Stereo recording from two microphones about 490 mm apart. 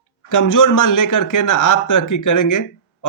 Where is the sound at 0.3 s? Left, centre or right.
Left.